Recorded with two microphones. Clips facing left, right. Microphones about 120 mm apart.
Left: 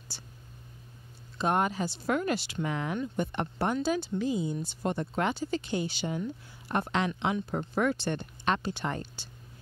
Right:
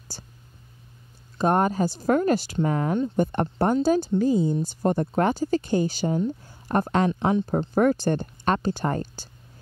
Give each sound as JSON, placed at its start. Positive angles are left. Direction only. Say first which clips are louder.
{"t": 0.1, "sound": "speech", "louder": "right 5 dB", "side_deg": -45}
{"t": 1.4, "sound": "speech", "louder": "right 6 dB", "side_deg": -45}